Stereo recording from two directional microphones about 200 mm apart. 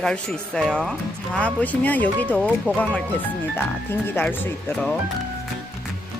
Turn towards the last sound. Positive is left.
turn(degrees=10)  # may be behind; listen again after turning